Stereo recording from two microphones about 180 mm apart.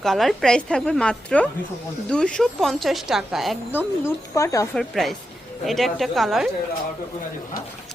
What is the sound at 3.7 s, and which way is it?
Speech, 15° left (ahead or behind).